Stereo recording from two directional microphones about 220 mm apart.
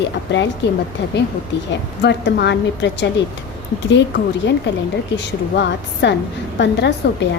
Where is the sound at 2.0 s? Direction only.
50° left (ahead or behind).